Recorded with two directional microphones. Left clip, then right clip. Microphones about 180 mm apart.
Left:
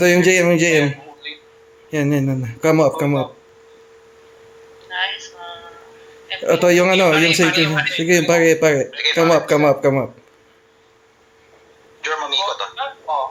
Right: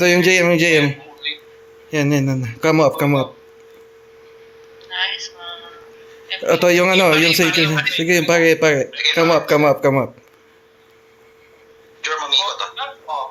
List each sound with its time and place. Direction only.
0.0 s speech: centre (ahead or behind)
1.2 s a sound: 30° left (ahead or behind)
1.9 s speech: centre (ahead or behind)
4.9 s a sound: 35° left (ahead or behind)
6.4 s speech: centre (ahead or behind)
7.4 s speech: 35° left (ahead or behind)
7.9 s speech: centre (ahead or behind)
8.9 s speech: 35° left (ahead or behind)
9.1 s speech: 5° left (ahead or behind)
12.0 s radio: 35° left (ahead or behind)